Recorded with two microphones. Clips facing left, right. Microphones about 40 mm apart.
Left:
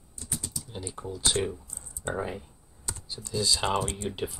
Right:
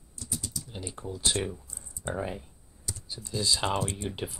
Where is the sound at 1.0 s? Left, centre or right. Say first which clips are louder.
Left 2 dB; centre.